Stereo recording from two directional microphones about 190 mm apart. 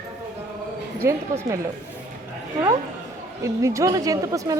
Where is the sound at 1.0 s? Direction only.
15° right (ahead or behind).